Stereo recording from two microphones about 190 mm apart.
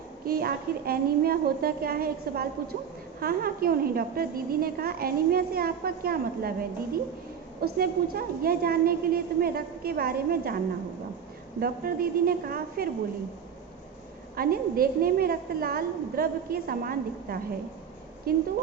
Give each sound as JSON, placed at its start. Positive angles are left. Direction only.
{"t": 0.3, "sound": "a woman's voice", "side_deg": -50}
{"t": 11.6, "sound": "a woman's voice", "side_deg": -50}
{"t": 14.3, "sound": "a woman's voice", "side_deg": -50}